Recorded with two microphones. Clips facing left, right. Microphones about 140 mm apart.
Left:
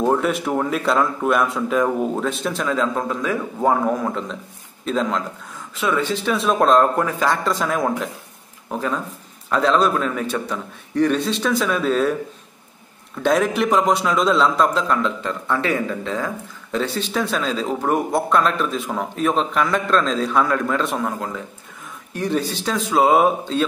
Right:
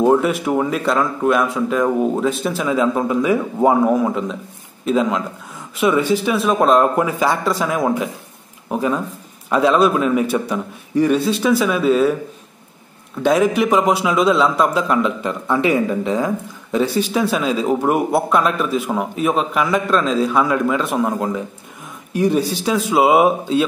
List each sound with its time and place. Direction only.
0.0 s speech: 5° right (ahead or behind)
13.2 s speech: 5° right (ahead or behind)
21.0 s speech: 20° right (ahead or behind)